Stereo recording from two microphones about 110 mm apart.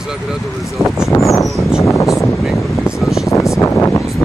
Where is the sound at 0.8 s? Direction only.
25° right (ahead or behind).